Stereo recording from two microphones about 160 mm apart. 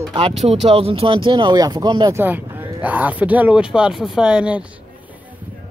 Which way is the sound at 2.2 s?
10° right (ahead or behind).